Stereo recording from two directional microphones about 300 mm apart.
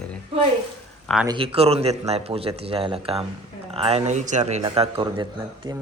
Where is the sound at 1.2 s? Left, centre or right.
Centre.